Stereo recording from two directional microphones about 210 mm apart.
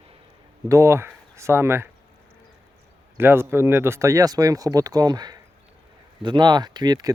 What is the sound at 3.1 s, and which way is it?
Speech, 10° right (ahead or behind).